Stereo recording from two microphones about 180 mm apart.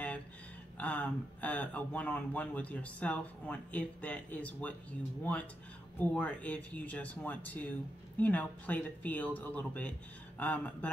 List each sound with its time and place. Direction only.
0.7 s speech: 10° left (ahead or behind)